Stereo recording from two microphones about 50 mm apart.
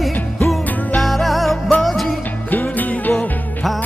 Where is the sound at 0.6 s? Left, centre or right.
Left.